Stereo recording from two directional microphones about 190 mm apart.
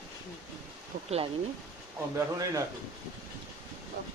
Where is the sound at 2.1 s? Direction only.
15° right (ahead or behind).